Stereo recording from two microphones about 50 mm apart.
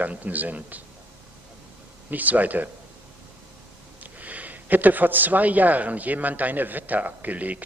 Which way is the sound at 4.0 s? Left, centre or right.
Right.